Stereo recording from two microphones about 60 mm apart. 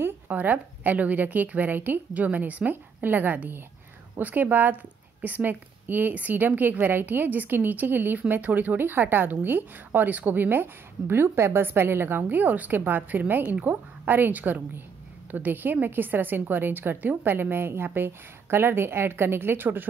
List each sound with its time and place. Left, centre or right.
0.3 s a woman's voice: right